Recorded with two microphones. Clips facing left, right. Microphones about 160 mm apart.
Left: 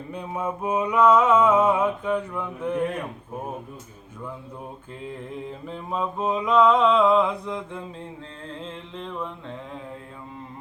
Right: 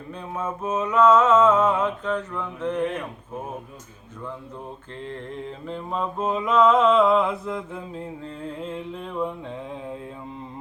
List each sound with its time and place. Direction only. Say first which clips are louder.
0.1 s mantra: left 1 dB; 15° left (ahead or behind)
5.0 s mantra: even; 5° left (ahead or behind)
8.4 s music: right 5 dB; 10° right (ahead or behind)